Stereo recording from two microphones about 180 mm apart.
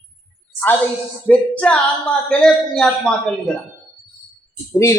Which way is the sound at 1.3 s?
5° left (ahead or behind).